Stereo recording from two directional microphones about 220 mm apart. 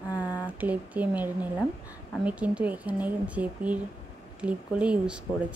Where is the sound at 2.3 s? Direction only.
5° right (ahead or behind).